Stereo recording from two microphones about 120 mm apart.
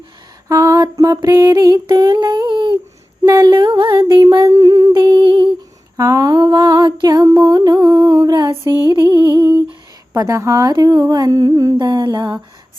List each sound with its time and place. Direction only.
0.4 s female singing: 25° right (ahead or behind)
3.2 s a sound: 30° right (ahead or behind)
10.2 s female singing: 25° right (ahead or behind)